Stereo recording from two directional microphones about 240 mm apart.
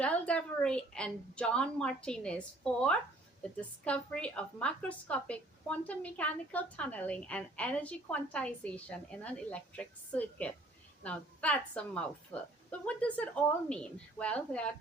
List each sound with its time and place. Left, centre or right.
0.0 s a woman's voice: centre
3.4 s a woman's voice: centre